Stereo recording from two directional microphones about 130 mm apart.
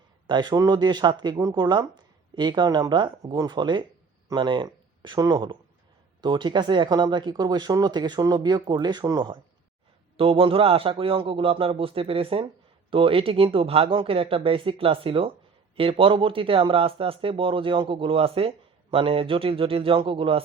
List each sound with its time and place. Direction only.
0.3 s speech: 35° right (ahead or behind)
10.2 s speech: 45° right (ahead or behind)